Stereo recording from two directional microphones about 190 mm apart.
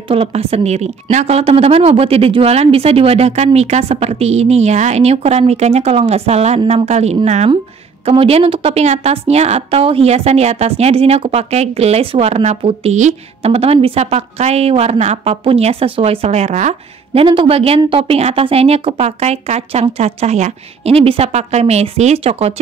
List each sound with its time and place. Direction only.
0.1 s a woman's voice: 30° right (ahead or behind)